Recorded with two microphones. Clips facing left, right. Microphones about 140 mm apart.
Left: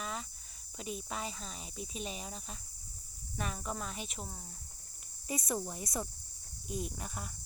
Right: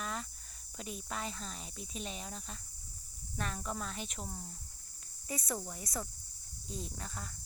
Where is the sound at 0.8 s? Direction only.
Centre (ahead or behind).